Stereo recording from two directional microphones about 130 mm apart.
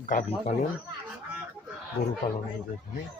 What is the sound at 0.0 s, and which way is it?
Speech, 80° left.